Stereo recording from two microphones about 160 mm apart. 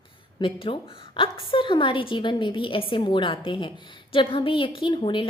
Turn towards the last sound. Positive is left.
turn(degrees=30)  # may be behind; listen again after turning